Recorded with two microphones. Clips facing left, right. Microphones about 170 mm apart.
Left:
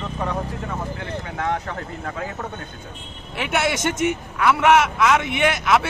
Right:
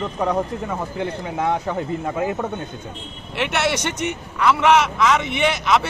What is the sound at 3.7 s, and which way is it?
Speech, 45° left (ahead or behind).